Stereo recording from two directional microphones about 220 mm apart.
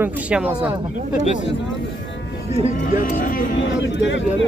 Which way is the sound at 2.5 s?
35° left (ahead or behind).